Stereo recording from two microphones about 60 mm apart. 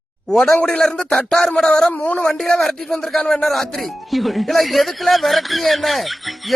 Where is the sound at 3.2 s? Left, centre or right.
Centre.